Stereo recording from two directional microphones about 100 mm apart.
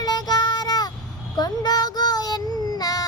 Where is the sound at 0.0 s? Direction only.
40° left (ahead or behind).